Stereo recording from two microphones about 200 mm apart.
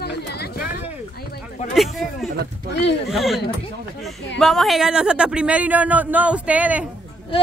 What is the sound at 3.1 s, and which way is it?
Speech, centre (ahead or behind).